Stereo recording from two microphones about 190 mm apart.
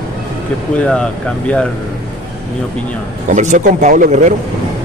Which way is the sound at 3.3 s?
40° right (ahead or behind).